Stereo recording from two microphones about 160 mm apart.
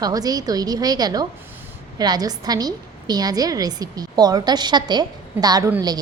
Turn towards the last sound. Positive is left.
turn(degrees=-25)  # may be behind; listen again after turning